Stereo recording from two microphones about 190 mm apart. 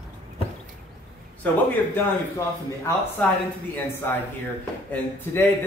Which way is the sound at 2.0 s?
15° left (ahead or behind).